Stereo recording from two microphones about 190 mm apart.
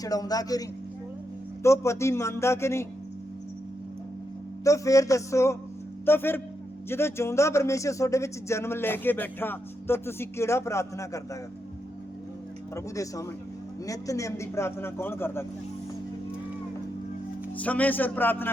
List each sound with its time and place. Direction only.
0.0 s speech: 20° left (ahead or behind)
4.6 s speech: 15° left (ahead or behind)
12.7 s speech: 15° left (ahead or behind)
17.6 s speech: 10° left (ahead or behind)